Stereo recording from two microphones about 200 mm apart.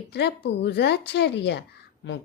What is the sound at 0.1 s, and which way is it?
Speech, 55° left (ahead or behind).